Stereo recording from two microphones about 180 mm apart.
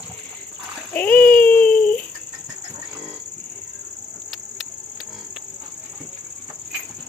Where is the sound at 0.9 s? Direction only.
10° left (ahead or behind).